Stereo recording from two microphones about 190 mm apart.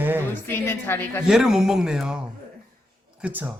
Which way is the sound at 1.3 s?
Centre (ahead or behind).